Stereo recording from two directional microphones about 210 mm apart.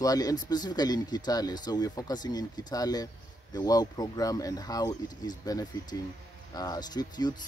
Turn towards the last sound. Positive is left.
turn(degrees=20)  # may be behind; listen again after turning